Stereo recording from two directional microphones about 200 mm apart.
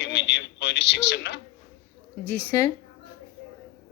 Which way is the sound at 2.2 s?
10° left (ahead or behind).